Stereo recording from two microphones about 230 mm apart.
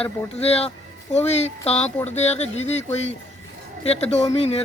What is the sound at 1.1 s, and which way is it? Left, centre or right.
Speech, left.